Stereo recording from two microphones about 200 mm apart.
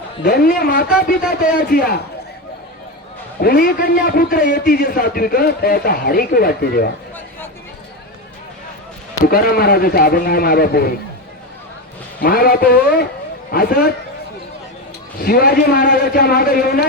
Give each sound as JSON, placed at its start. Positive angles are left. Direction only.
{"t": 0.2, "sound": "a man's voice", "side_deg": 50}
{"t": 3.4, "sound": "a man's voice", "side_deg": 50}
{"t": 9.2, "sound": "a man's voice", "side_deg": 45}
{"t": 12.2, "sound": "a man's voice", "side_deg": 50}
{"t": 15.2, "sound": "a man's voice", "side_deg": 50}